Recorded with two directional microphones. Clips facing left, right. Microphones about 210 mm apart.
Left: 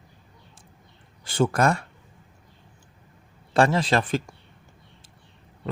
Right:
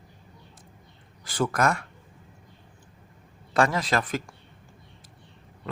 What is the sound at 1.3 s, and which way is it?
Speech, 25° left (ahead or behind).